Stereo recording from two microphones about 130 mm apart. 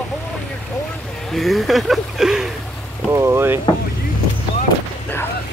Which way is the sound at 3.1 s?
20° right (ahead or behind).